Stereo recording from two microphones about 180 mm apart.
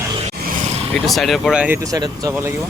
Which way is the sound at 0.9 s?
Centre (ahead or behind).